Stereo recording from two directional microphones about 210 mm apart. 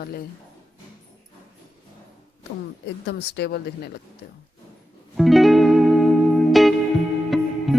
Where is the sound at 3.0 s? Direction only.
55° left (ahead or behind).